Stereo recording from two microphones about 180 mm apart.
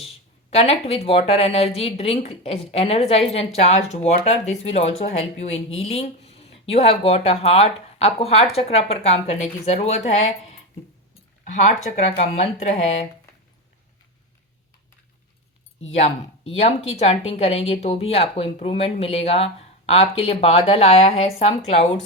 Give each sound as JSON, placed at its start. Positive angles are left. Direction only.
{"t": 0.5, "sound": "a woman's voice", "side_deg": 35}
{"t": 16.0, "sound": "a woman's voice", "side_deg": 35}